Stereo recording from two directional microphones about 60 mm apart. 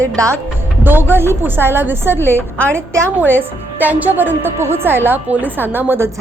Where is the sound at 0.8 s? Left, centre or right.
Right.